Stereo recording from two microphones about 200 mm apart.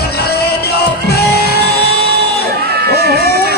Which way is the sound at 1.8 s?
55° right (ahead or behind).